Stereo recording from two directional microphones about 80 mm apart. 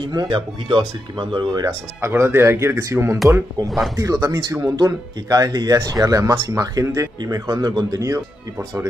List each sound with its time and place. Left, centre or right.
0.1 s speech: right
2.0 s speech: right
3.6 s speech: centre
3.9 s speech: right